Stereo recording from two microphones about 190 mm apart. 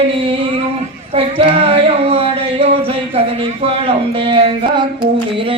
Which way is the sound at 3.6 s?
30° right (ahead or behind).